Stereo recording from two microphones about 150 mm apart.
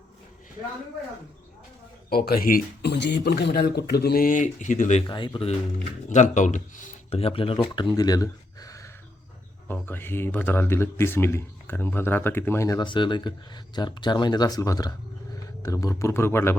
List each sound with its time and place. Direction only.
2.0 s speech: 90° left; by 5.0 s 55° left (ahead or behind)
5.0 s speech: 30° left (ahead or behind)
6.1 s speech: 55° left (ahead or behind)
7.1 s speech: 40° left (ahead or behind)
7.6 s speech: 30° left (ahead or behind)
9.6 s speech: 10° left (ahead or behind)